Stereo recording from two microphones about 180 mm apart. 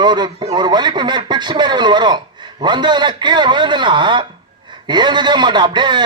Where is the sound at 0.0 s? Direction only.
25° right (ahead or behind).